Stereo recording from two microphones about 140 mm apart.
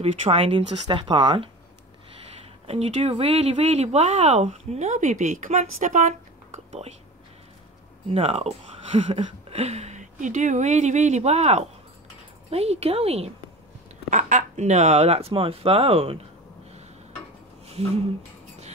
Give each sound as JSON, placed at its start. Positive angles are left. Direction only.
{"t": 0.0, "sound": "speech", "side_deg": -45}
{"t": 8.1, "sound": "speech", "side_deg": -45}
{"t": 14.1, "sound": "speech", "side_deg": -60}
{"t": 17.6, "sound": "speech", "side_deg": -45}